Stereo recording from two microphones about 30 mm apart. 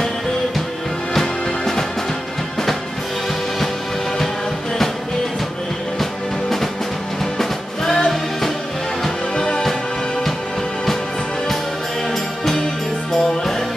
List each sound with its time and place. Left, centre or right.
7.3 s music: centre
9.3 s music: left